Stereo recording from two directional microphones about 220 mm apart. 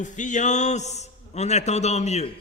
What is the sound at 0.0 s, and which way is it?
A man's voice, 35° left (ahead or behind).